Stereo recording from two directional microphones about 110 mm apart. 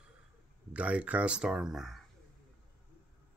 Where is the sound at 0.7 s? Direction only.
10° right (ahead or behind).